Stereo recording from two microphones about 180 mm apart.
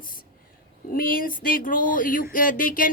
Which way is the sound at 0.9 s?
50° left (ahead or behind).